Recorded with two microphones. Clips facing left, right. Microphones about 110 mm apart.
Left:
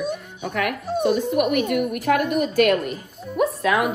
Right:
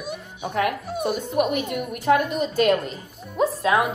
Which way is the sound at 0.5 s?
30° right (ahead or behind).